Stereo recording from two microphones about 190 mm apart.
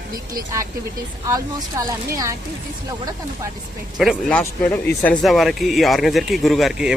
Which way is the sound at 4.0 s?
Centre (ahead or behind).